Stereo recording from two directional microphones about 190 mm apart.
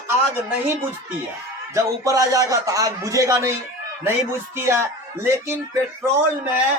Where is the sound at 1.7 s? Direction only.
15° right (ahead or behind).